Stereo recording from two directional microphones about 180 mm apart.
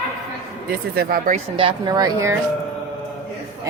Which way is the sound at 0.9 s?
50° right (ahead or behind).